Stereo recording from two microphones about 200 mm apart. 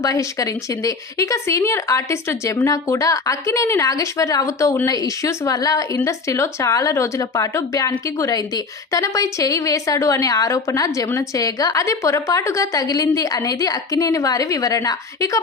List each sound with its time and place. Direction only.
0.0 s speech: 15° left (ahead or behind)